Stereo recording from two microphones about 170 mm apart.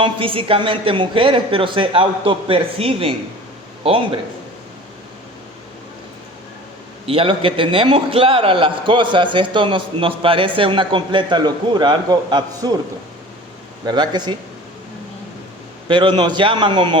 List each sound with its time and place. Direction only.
0.0 s a woman's voice: 30° right (ahead or behind)
7.1 s a man's voice: 30° right (ahead or behind)
13.8 s a man's voice: 25° right (ahead or behind)
15.9 s a man's voice: 30° right (ahead or behind)